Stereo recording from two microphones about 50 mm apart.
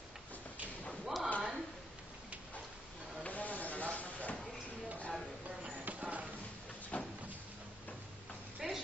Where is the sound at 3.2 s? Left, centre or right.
Left.